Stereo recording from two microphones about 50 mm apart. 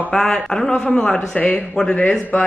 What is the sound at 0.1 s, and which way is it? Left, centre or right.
A man's voice, centre.